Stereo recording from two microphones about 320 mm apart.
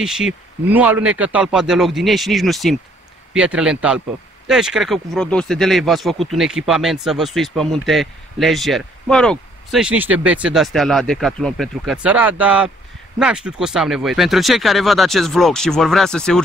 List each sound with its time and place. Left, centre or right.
0.0 s speech: centre